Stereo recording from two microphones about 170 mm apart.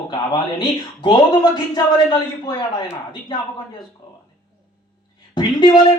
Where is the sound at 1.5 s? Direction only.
25° left (ahead or behind).